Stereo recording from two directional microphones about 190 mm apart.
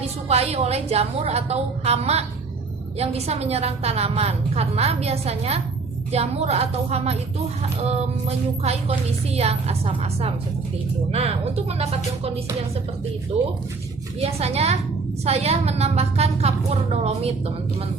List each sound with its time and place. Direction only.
0.0 s a woman's voice: 35° right (ahead or behind)
13.3 s a woman's voice: 35° right (ahead or behind)